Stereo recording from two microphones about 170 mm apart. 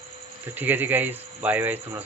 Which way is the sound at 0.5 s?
10° right (ahead or behind).